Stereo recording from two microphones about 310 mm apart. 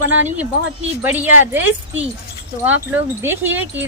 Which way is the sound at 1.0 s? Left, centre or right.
Centre.